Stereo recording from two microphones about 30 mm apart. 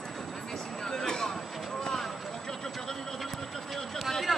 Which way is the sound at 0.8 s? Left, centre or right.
Centre.